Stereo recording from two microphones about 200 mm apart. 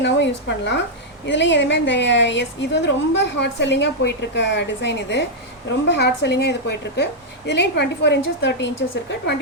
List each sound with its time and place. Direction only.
0.0 s a woman's voice: 60° left (ahead or behind)